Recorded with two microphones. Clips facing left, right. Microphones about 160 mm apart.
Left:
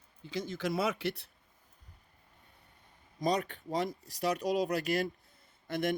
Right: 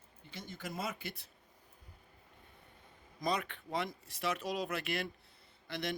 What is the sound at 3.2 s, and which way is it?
Speech, 40° left (ahead or behind).